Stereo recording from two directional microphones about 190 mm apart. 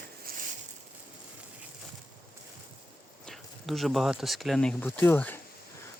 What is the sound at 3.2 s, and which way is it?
Speech, centre (ahead or behind).